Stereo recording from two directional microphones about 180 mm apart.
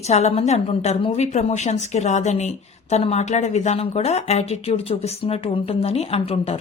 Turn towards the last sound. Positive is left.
turn(degrees=35)  # may be behind; listen again after turning